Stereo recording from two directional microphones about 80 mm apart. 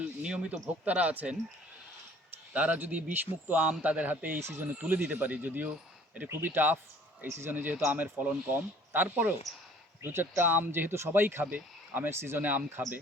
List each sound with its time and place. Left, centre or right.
0.0 s a sound: centre
0.9 s a man's voice: centre
4.4 s speech: right
4.8 s speech: centre
7.5 s speech: right